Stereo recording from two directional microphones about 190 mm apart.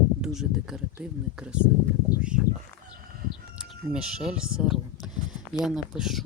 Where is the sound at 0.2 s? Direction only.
Centre (ahead or behind).